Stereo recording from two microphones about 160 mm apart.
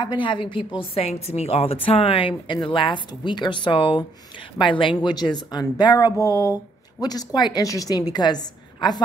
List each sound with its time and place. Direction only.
0.0 s a woman's voice: 30° left (ahead or behind)